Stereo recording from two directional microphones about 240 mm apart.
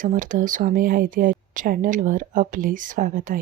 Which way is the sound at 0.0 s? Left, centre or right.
Right.